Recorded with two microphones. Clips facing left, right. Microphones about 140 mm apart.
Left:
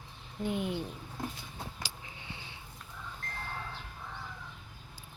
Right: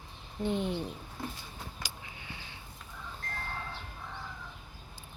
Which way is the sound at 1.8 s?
25° left (ahead or behind).